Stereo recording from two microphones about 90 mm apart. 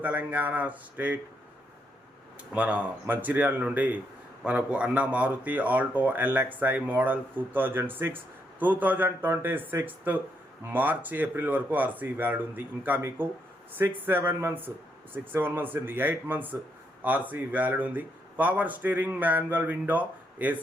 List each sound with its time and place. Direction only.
0.0 s speech: 20° right (ahead or behind)
2.5 s speech: 15° right (ahead or behind)
13.0 s speech: 30° right (ahead or behind)